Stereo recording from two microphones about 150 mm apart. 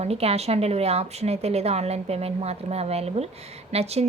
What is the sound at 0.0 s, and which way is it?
A woman's voice, 45° right (ahead or behind).